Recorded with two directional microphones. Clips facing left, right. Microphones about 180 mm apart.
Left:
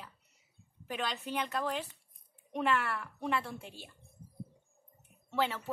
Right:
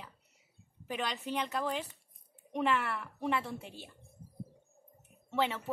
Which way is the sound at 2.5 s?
20° right (ahead or behind).